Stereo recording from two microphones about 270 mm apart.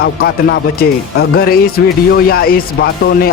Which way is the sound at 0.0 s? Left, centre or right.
Left.